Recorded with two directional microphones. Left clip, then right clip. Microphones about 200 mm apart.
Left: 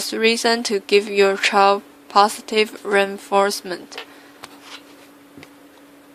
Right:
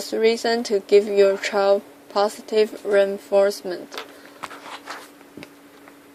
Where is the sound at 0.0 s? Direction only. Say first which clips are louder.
Left 2 dB; 25° left (ahead or behind).